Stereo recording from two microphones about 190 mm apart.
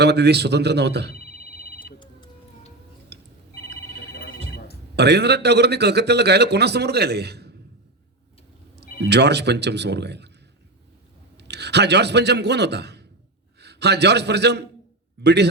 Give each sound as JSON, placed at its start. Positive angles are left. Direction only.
{"t": 0.0, "sound": "a man's voice", "side_deg": -60}
{"t": 1.1, "sound": "telephone", "side_deg": 50}
{"t": 2.0, "sound": "tick-tock", "side_deg": 25}
{"t": 3.1, "sound": "telephone", "side_deg": -60}
{"t": 3.5, "sound": "telephone", "side_deg": 55}
{"t": 4.9, "sound": "a man's voice", "side_deg": -60}
{"t": 8.7, "sound": "a man's voice", "side_deg": -60}
{"t": 11.3, "sound": "a man's voice", "side_deg": -60}